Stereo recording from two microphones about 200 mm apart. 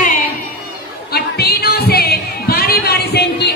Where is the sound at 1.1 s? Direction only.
50° left (ahead or behind).